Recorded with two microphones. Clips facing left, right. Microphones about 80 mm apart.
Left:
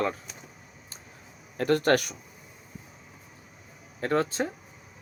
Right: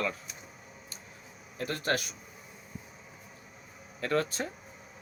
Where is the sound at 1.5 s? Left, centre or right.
Left.